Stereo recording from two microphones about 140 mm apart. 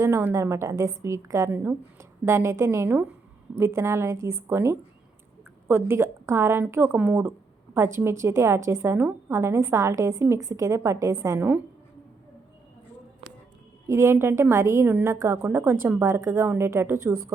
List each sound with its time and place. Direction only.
0.0 s a woman's voice: 20° right (ahead or behind)
13.8 s a woman's voice: 20° right (ahead or behind)